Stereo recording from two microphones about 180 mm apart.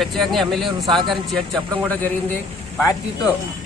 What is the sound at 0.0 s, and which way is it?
Speech, centre (ahead or behind).